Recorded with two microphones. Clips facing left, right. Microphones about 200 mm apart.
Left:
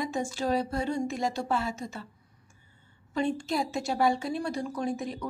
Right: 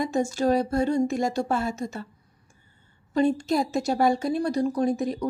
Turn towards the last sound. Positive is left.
turn(degrees=-40)  # may be behind; listen again after turning